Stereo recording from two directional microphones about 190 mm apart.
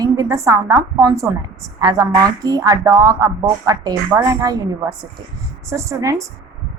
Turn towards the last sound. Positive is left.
turn(degrees=-15)  # may be behind; listen again after turning